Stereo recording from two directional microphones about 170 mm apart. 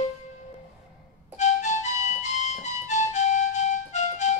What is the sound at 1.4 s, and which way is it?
Music, 45° left (ahead or behind).